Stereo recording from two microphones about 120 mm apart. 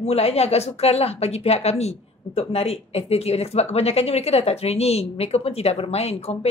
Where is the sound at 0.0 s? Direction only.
60° left (ahead or behind).